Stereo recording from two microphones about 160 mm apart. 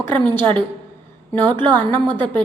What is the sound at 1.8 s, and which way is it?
Speech, 10° left (ahead or behind).